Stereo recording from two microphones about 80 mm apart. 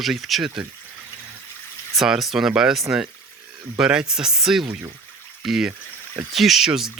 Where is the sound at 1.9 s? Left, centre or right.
Centre.